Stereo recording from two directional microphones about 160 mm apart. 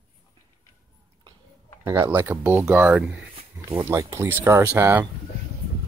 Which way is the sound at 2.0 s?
20° right (ahead or behind).